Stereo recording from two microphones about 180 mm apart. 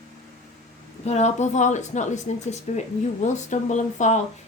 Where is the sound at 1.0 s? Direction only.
40° left (ahead or behind).